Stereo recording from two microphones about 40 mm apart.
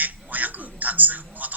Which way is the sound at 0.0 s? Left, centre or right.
Right.